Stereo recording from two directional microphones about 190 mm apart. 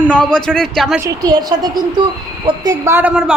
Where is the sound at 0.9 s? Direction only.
20° right (ahead or behind).